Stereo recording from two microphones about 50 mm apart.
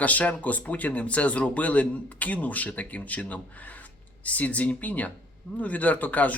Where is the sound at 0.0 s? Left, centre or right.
Left.